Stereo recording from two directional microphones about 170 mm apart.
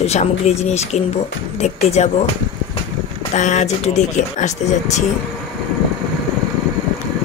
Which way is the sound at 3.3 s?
45° left (ahead or behind).